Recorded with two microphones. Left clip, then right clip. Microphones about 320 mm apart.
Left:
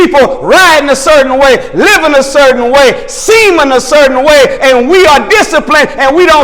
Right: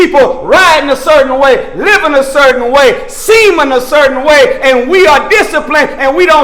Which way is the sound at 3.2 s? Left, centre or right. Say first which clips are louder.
Even; left.